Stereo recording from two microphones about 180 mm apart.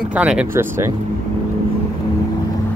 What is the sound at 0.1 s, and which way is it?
Speech, 5° right (ahead or behind).